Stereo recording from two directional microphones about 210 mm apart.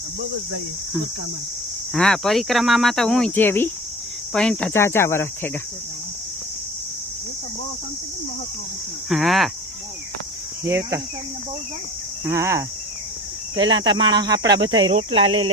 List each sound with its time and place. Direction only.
1.9 s speech: centre (ahead or behind)
4.3 s cricket: 5° left (ahead or behind)
9.0 s speech: centre (ahead or behind)
10.6 s speech: 10° right (ahead or behind)
12.2 s cricket: 15° right (ahead or behind)
13.6 s speech: 20° right (ahead or behind)